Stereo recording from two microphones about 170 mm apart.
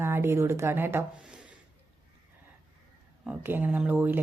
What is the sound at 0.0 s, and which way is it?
A woman's voice, 15° right (ahead or behind).